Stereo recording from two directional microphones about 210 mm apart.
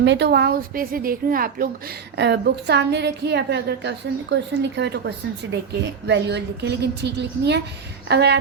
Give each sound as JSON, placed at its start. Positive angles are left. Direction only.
{"t": 0.0, "sound": "a woman's voice", "side_deg": -55}